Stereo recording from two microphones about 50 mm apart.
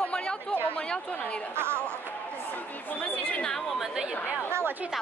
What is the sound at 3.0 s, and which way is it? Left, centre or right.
Speech, left.